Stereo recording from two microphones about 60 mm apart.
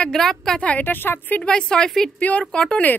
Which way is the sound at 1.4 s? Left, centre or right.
Centre.